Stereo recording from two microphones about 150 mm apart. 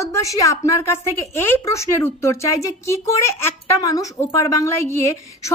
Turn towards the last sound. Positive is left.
turn(degrees=15)  # may be behind; listen again after turning